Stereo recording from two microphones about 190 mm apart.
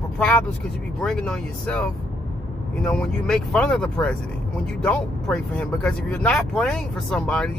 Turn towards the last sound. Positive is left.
turn(degrees=5)  # may be behind; listen again after turning